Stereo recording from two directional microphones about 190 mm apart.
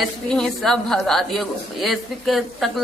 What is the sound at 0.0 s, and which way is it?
A woman's voice, centre (ahead or behind).